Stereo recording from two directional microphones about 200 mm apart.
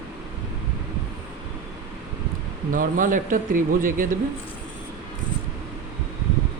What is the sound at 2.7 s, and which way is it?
Speech, 40° right (ahead or behind).